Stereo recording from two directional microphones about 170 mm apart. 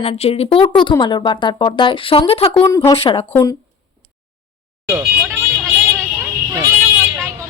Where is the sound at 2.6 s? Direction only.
20° left (ahead or behind).